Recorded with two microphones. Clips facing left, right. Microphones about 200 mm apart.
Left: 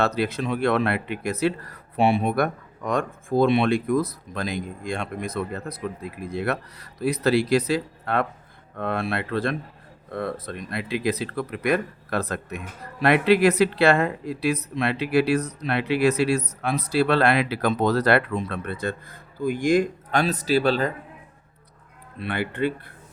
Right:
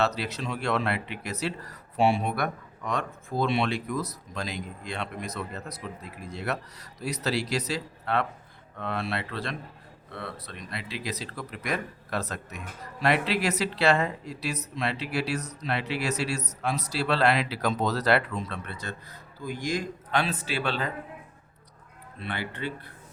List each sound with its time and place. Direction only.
0.0 s speech: 55° left (ahead or behind)
22.2 s speech: 55° left (ahead or behind)